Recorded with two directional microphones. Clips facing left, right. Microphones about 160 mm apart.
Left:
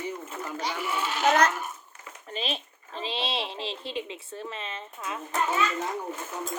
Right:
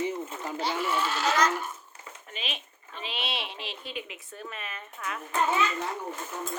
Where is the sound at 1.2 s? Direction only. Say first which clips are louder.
Left 5 dB; 55° left (ahead or behind).